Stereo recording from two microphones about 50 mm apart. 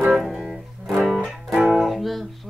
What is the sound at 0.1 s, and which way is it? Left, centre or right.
Music, centre.